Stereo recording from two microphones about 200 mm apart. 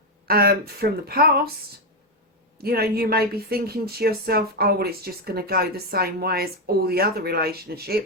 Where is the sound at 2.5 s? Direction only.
50° right (ahead or behind).